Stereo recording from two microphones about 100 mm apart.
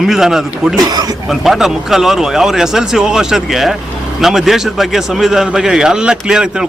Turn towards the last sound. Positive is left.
turn(degrees=-5)  # may be behind; listen again after turning